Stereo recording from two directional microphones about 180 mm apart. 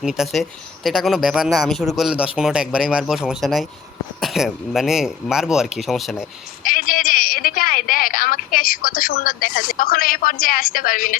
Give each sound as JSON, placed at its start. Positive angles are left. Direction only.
{"t": 0.0, "sound": "a man's voice", "side_deg": -5}
{"t": 6.6, "sound": "a woman's voice", "side_deg": 50}